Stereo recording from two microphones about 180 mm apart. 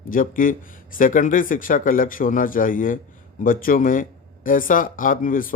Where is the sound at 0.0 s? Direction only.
50° left (ahead or behind).